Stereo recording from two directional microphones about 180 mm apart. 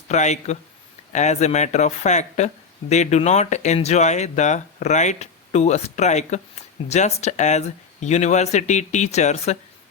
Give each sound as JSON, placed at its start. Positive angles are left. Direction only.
{"t": 0.1, "sound": "speech", "side_deg": 40}